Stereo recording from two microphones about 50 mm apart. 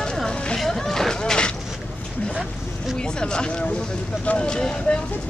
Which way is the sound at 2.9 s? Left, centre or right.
Centre.